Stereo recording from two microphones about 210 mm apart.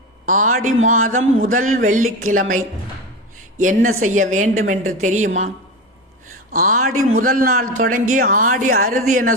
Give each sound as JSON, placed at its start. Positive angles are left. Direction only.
{"t": 0.3, "sound": "speech", "side_deg": -40}
{"t": 2.0, "sound": "speech", "side_deg": -85}
{"t": 2.3, "sound": "speech", "side_deg": -40}
{"t": 3.6, "sound": "speech", "side_deg": -40}
{"t": 6.5, "sound": "speech", "side_deg": -40}
{"t": 6.9, "sound": "a man's voice", "side_deg": -75}
{"t": 7.2, "sound": "a man's voice", "side_deg": -45}